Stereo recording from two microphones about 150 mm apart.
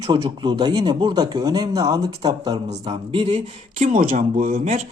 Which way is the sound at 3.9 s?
60° right (ahead or behind).